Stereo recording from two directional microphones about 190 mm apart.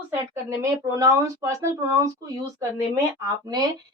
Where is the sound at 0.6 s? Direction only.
15° right (ahead or behind).